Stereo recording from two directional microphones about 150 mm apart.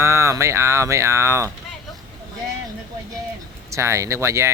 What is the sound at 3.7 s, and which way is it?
Speech, 20° right (ahead or behind).